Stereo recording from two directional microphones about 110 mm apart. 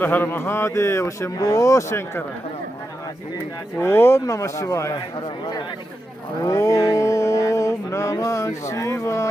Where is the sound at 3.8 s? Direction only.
20° left (ahead or behind).